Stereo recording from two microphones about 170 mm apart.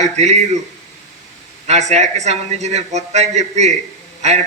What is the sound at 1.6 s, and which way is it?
A man's voice, 40° right (ahead or behind).